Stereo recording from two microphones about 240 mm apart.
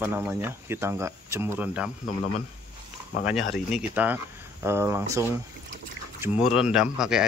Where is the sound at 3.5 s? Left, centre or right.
Centre.